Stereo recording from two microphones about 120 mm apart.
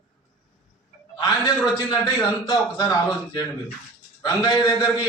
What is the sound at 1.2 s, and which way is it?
A man's voice, 35° left (ahead or behind).